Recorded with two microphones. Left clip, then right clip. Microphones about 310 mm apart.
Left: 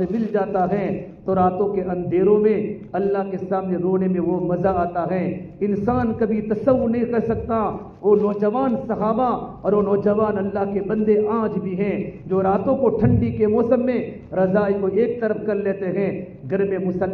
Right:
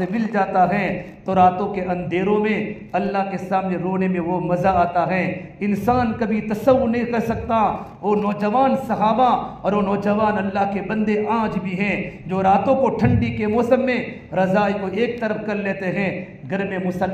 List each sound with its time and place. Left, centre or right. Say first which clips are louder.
0.3 s a man's voice: right 4 dB; centre